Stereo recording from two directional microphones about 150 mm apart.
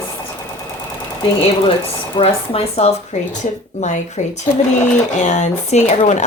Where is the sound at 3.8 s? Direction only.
50° left (ahead or behind).